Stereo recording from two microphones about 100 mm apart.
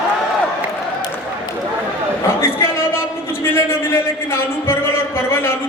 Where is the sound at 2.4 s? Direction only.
25° left (ahead or behind).